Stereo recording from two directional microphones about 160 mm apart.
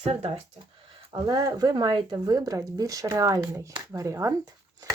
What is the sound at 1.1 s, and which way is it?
Speech, 25° right (ahead or behind).